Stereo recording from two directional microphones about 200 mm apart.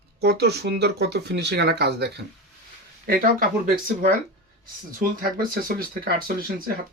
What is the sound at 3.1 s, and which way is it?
Speech, 45° right (ahead or behind).